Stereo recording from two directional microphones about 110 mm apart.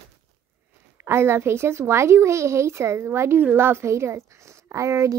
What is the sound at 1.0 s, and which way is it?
Speech, 20° right (ahead or behind).